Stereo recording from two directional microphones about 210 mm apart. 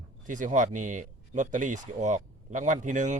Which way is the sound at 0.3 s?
40° right (ahead or behind).